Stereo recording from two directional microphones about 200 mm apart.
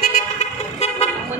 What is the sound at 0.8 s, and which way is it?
Vehicle, 30° left (ahead or behind).